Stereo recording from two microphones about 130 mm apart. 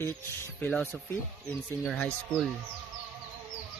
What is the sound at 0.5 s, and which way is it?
Speech, 10° left (ahead or behind).